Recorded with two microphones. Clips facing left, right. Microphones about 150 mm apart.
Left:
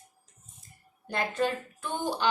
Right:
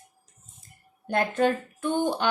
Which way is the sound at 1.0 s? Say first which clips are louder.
Right 6 dB; 55° right (ahead or behind).